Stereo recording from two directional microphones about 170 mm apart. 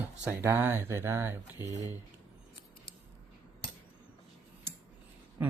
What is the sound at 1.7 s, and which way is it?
Speech, 20° left (ahead or behind).